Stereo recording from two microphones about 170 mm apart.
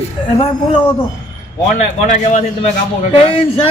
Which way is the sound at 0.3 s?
30° left (ahead or behind).